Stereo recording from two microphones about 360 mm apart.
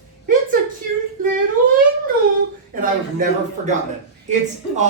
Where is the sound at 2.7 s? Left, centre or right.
Right.